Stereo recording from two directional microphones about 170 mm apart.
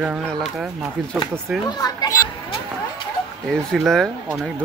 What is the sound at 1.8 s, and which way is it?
Speech, 20° left (ahead or behind).